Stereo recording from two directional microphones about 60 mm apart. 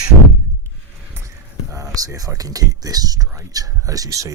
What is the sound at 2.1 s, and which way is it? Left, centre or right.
Speech, right.